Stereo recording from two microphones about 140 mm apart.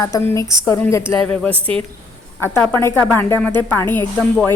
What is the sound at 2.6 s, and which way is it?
A woman's voice, 10° left (ahead or behind).